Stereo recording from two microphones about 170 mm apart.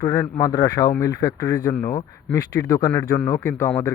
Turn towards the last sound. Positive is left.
turn(degrees=15)  # may be behind; listen again after turning